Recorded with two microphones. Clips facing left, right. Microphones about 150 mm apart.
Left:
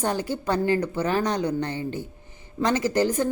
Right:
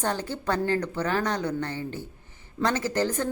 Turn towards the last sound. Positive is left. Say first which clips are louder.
# left 4 dB
turn(degrees=15)  # may be behind; listen again after turning